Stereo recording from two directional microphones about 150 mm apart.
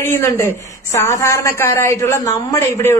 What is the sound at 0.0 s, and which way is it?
A man's voice, 20° left (ahead or behind).